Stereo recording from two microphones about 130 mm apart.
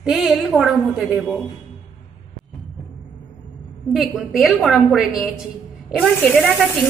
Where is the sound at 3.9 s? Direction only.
Centre (ahead or behind).